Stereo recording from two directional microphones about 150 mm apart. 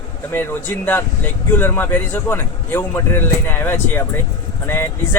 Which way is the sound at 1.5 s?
15° left (ahead or behind).